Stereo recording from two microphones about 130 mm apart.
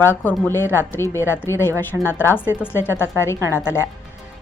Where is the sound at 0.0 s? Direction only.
15° left (ahead or behind).